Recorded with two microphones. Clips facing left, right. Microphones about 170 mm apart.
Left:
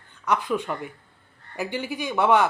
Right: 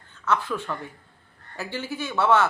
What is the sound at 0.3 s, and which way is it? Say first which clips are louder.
Speech: left 2 dB; 15° left (ahead or behind).